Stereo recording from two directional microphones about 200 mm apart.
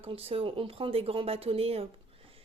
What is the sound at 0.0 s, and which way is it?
Speech, 30° right (ahead or behind).